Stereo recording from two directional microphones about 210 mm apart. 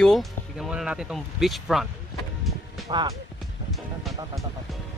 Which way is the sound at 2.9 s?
25° right (ahead or behind).